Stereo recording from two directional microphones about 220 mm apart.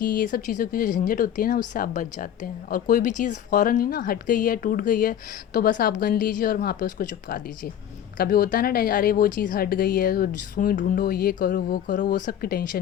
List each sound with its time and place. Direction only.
0.0 s speech: 40° left (ahead or behind)